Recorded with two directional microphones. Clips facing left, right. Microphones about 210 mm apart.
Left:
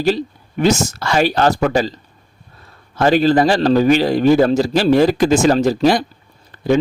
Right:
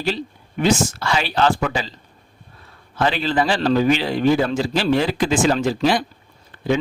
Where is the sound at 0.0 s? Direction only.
40° left (ahead or behind).